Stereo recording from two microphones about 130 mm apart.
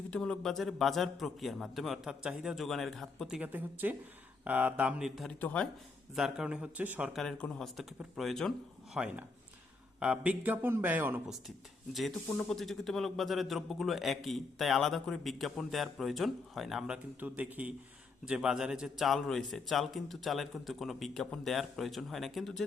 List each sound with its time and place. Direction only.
0.1 s a man's voice: 5° left (ahead or behind)
5.4 s speech: 10° left (ahead or behind)
6.1 s speech: 5° right (ahead or behind)
7.1 s a man's voice: 5° left (ahead or behind)
10.0 s speech: 10° right (ahead or behind)
11.9 s a man's voice: centre (ahead or behind)